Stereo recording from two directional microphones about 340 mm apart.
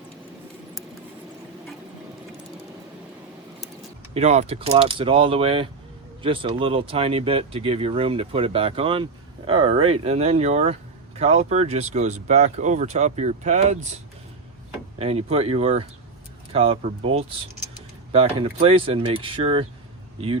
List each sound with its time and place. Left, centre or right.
4.1 s speech: centre
14.9 s speech: centre